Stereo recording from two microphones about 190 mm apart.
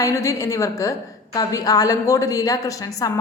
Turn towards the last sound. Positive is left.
turn(degrees=20)  # may be behind; listen again after turning